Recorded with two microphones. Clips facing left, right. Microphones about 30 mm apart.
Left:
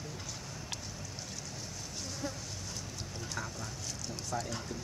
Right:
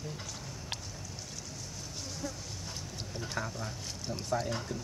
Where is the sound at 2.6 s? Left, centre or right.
Right.